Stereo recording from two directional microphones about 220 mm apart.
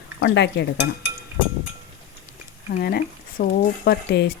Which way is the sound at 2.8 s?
45° left (ahead or behind).